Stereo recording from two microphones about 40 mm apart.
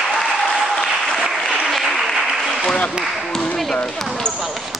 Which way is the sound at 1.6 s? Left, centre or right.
Centre.